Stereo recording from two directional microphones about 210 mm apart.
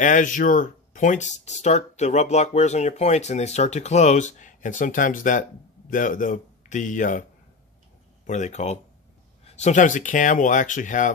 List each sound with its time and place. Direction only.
0.0 s speech: 40° left (ahead or behind)
8.3 s speech: 35° left (ahead or behind)